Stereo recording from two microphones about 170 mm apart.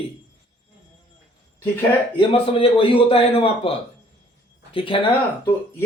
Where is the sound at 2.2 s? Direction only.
35° left (ahead or behind).